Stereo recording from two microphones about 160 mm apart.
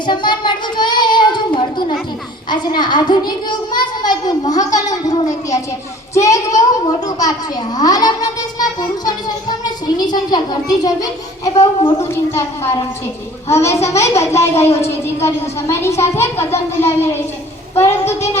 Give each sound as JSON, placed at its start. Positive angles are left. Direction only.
{"t": 0.0, "sound": "child singing", "side_deg": 30}
{"t": 2.5, "sound": "a woman's voice", "side_deg": 30}